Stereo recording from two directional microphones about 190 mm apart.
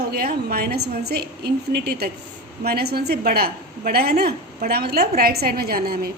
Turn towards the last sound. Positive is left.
turn(degrees=-50)  # may be behind; listen again after turning